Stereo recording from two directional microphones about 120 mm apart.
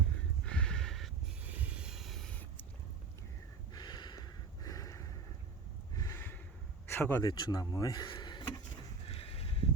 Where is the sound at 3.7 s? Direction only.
35° left (ahead or behind).